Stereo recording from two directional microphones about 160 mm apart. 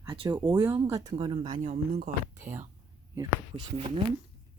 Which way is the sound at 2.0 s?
55° right (ahead or behind).